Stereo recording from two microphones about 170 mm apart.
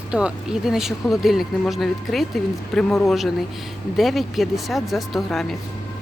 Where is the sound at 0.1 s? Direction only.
5° right (ahead or behind).